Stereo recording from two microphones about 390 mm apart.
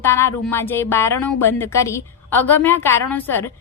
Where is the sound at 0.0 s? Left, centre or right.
Centre.